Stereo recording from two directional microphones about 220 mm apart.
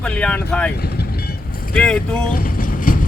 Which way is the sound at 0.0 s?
5° left (ahead or behind).